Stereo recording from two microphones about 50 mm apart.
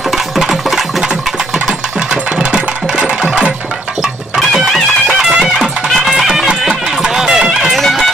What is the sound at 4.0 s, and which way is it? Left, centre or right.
Music, centre.